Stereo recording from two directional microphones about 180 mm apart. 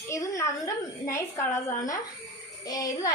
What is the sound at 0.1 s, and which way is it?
A woman's voice, 15° left (ahead or behind).